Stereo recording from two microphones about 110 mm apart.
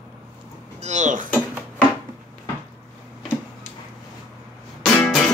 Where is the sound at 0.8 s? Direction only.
90° right.